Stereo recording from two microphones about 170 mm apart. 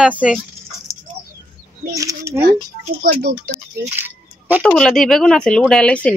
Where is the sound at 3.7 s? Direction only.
10° right (ahead or behind).